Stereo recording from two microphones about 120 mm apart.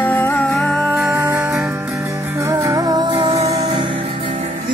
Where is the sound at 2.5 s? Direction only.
30° right (ahead or behind).